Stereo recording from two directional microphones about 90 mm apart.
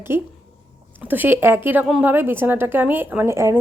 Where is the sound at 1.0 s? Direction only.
20° right (ahead or behind).